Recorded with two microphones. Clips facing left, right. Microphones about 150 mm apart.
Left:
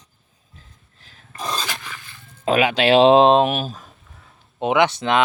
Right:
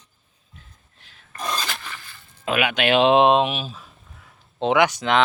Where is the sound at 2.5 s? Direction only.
35° left (ahead or behind).